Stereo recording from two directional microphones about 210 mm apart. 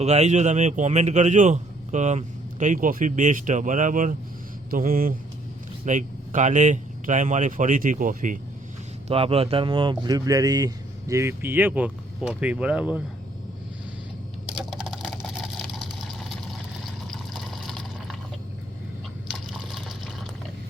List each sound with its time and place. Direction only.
0.0 s a man's voice: 30° right (ahead or behind)
9.0 s speech: 25° right (ahead or behind); by 13.0 s 5° right (ahead or behind)
14.5 s a sound: 5° right (ahead or behind)
17.1 s water: centre (ahead or behind)